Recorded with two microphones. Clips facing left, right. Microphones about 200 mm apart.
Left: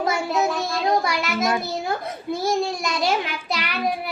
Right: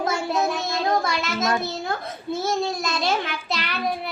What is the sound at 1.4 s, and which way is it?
A child's voice, 10° left (ahead or behind).